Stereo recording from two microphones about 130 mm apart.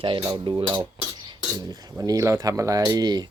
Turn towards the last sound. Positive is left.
turn(degrees=-30)  # may be behind; listen again after turning